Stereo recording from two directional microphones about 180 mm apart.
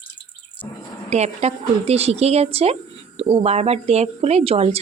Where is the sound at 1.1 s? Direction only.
35° right (ahead or behind).